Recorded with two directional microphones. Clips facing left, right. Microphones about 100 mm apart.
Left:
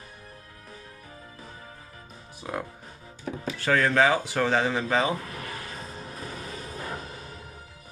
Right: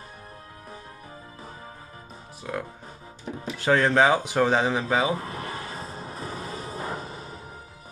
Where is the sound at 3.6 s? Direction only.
25° right (ahead or behind).